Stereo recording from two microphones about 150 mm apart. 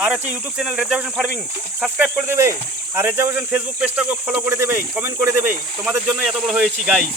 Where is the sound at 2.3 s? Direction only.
15° right (ahead or behind).